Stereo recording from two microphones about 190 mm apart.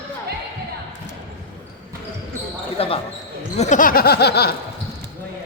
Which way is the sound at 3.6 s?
40° left (ahead or behind).